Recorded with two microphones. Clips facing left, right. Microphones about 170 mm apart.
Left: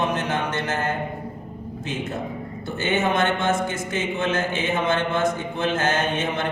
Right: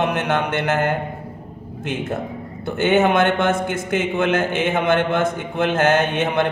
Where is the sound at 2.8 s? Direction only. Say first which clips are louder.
Right 6 dB; 60° right (ahead or behind).